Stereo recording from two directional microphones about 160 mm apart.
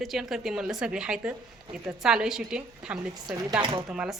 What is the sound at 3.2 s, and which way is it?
Speech, 25° right (ahead or behind).